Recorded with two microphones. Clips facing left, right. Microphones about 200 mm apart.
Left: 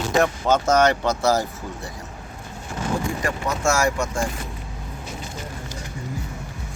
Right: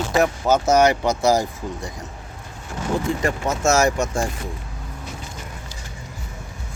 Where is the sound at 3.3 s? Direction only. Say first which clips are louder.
Right 2 dB; 20° right (ahead or behind).